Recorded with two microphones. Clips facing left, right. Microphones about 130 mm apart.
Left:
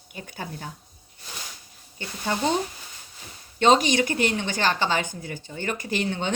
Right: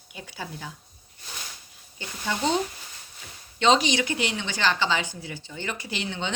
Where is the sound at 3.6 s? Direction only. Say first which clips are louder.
Left 2 dB; 50° left (ahead or behind).